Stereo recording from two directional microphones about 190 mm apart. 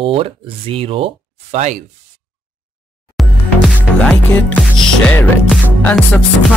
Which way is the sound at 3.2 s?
Centre (ahead or behind).